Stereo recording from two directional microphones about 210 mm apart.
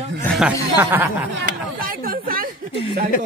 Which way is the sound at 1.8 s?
45° right (ahead or behind).